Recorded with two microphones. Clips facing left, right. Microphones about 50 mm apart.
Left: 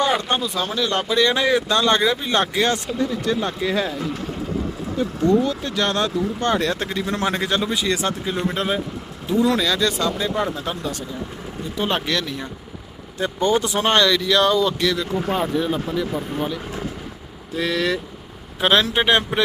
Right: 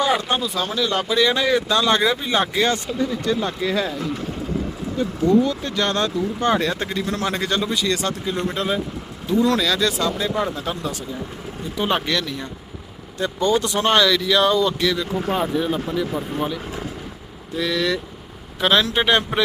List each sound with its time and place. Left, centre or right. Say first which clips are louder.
0.0 s speech: even; centre
7.1 s speech: left 3 dB; left
7.3 s speech: even; centre
13.1 s speech: even; left
13.7 s speech: even; centre
13.9 s speech: even; centre